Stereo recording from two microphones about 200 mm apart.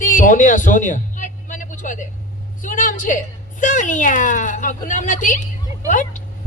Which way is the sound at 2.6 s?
40° left (ahead or behind).